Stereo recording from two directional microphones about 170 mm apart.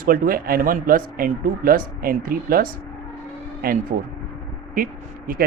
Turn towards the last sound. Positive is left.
turn(degrees=-55)  # may be behind; listen again after turning